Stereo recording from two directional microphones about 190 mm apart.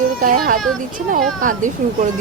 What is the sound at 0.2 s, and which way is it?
A woman's voice, 45° right (ahead or behind).